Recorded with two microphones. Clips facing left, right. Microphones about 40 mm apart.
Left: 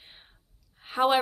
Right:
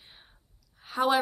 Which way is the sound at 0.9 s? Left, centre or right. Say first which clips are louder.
Left 2 dB; left.